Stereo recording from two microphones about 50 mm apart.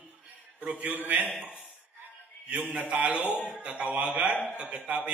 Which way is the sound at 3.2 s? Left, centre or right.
Left.